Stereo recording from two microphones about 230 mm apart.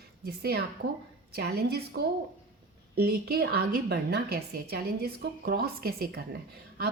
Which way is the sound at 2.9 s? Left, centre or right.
Right.